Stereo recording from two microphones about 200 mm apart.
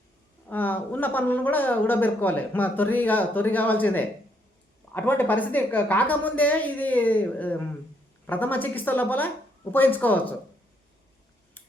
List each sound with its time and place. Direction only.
0.4 s speech: 10° left (ahead or behind)